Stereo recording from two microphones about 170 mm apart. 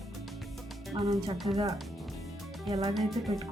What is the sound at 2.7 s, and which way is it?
Speech, 20° right (ahead or behind).